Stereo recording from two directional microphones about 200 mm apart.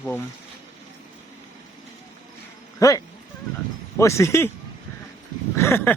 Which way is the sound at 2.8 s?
15° left (ahead or behind).